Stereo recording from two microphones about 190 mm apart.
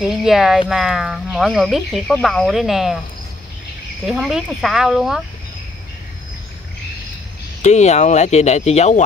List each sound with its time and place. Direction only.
0.0 s speech: centre (ahead or behind)
4.0 s speech: centre (ahead or behind)
7.6 s speech: 40° left (ahead or behind)